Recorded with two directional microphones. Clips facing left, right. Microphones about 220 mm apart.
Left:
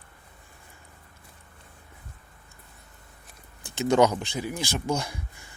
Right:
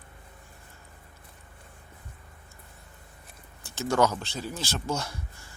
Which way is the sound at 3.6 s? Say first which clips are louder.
Left 4 dB; 20° left (ahead or behind).